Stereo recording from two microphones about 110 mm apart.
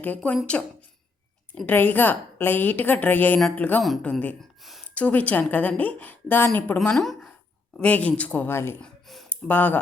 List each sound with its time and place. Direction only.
0.0 s a woman's voice: 15° left (ahead or behind)
1.6 s a woman's voice: 15° left (ahead or behind)
6.9 s a woman's voice: centre (ahead or behind); by 8.7 s 20° left (ahead or behind)
8.8 s a sound: centre (ahead or behind)
9.3 s speech: 15° left (ahead or behind)